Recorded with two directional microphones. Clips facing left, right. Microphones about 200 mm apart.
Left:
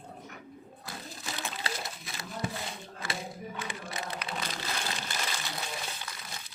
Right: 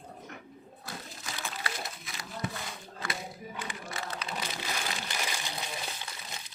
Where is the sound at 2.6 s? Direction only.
25° left (ahead or behind); by 4.4 s 10° left (ahead or behind).